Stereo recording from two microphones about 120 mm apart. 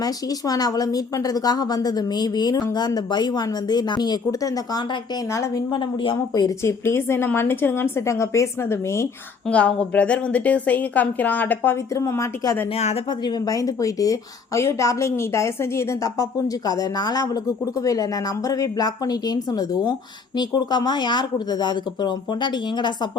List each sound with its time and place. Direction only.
0.0 s a woman's voice: 30° left (ahead or behind)
5.7 s a woman's voice: 40° left (ahead or behind)
6.6 s a woman's voice: 20° left (ahead or behind)
9.5 s a woman's voice: 10° left (ahead or behind)
12.7 s speech: 60° left (ahead or behind)
13.1 s a woman's voice: 35° left (ahead or behind)